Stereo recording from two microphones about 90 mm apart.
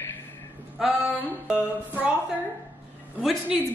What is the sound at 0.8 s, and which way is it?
Speech, 5° right (ahead or behind).